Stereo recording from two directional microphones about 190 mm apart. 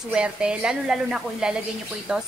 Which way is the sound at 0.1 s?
5° right (ahead or behind).